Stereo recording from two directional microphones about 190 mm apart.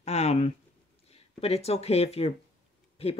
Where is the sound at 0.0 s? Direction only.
35° left (ahead or behind).